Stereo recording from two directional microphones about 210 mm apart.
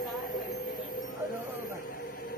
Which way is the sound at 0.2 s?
40° left (ahead or behind).